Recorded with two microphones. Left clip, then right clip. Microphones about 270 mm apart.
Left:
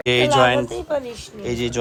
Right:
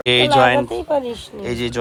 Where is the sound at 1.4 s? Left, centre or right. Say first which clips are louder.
Even; centre.